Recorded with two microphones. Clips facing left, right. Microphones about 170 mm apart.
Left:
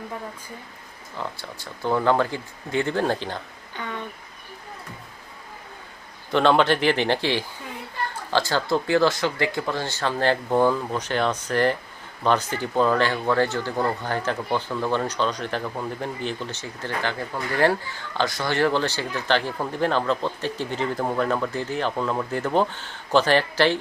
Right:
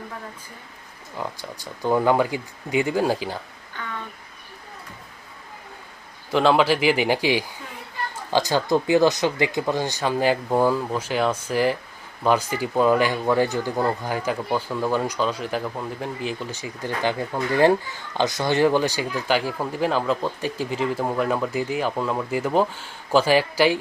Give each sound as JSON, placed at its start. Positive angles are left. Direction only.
{"t": 1.1, "sound": "speech", "side_deg": -15}
{"t": 3.8, "sound": "speech", "side_deg": 20}
{"t": 6.3, "sound": "speech", "side_deg": -5}